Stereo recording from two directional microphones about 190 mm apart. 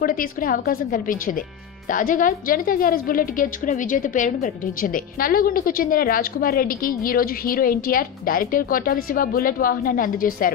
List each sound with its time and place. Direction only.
0.0 s a woman's voice: 50° left (ahead or behind)